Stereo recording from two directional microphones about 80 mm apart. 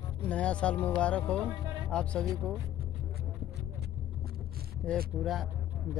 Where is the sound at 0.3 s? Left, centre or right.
Centre.